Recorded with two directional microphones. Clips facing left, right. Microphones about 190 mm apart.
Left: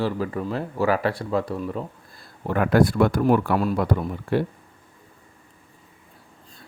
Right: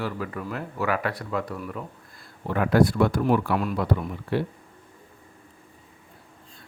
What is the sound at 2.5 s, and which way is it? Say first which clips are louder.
Speech: left 2 dB; 50° left (ahead or behind).